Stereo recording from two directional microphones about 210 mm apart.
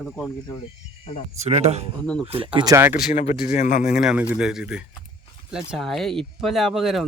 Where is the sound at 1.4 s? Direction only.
30° right (ahead or behind).